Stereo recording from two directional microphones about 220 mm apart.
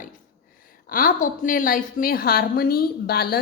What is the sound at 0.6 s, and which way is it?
A woman's voice, 40° left (ahead or behind).